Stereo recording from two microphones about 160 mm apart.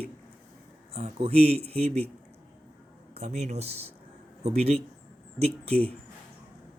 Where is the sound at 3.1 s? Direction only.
45° right (ahead or behind).